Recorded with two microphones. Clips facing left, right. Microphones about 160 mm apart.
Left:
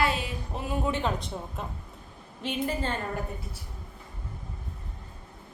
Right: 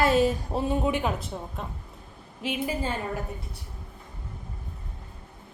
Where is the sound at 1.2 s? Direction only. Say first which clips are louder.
Right 1 dB; centre (ahead or behind).